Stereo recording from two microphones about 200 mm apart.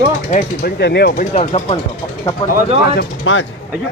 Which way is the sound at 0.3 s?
45° left (ahead or behind).